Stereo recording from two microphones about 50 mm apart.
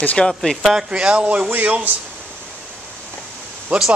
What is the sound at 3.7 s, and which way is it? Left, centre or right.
Speech, right.